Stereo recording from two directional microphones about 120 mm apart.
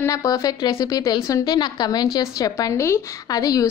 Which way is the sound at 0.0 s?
30° left (ahead or behind).